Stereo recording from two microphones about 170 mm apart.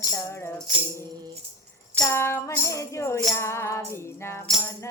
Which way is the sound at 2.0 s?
15° left (ahead or behind).